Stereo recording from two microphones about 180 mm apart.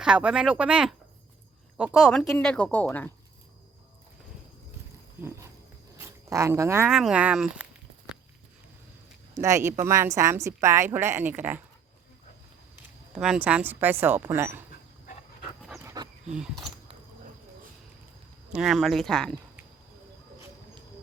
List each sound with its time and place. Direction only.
0.0 s speech: 5° right (ahead or behind)
6.0 s speech: 15° right (ahead or behind)
6.9 s speech: 5° right (ahead or behind)
9.3 s a woman's voice: 15° right (ahead or behind)
12.7 s speech: 5° right (ahead or behind)
15.6 s dog: 5° right (ahead or behind)
16.6 s a sound: 25° right (ahead or behind)
18.5 s speech: centre (ahead or behind)